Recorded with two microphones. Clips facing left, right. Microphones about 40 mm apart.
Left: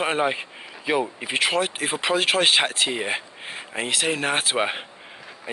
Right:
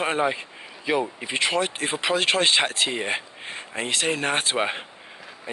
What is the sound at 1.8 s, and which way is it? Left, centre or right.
Speech, centre.